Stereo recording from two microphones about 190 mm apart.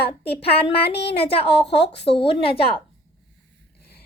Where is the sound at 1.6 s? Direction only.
60° left (ahead or behind).